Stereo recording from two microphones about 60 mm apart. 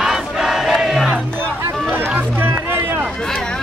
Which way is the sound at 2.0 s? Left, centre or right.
Right.